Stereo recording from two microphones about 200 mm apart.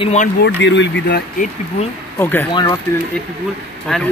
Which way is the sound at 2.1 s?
10° left (ahead or behind).